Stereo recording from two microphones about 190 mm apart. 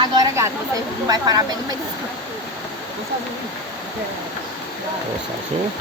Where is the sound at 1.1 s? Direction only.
20° right (ahead or behind).